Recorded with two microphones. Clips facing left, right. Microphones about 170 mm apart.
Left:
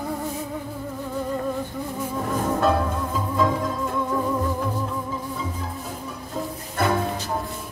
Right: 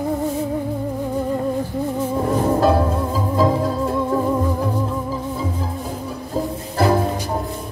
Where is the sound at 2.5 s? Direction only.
30° right (ahead or behind).